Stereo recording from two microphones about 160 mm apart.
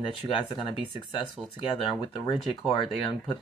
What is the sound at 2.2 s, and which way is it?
Speech, 30° left (ahead or behind).